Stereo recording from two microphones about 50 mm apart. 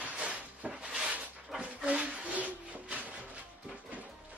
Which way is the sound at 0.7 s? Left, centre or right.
Centre.